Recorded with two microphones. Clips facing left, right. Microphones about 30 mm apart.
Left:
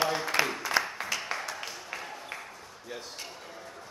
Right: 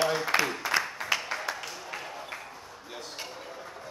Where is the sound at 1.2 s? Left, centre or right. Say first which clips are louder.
Right 1 dB; centre.